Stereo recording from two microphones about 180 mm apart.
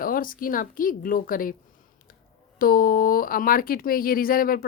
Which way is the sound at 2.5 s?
55° left (ahead or behind).